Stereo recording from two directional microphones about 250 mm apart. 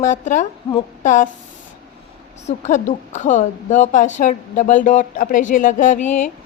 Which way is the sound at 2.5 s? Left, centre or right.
Left.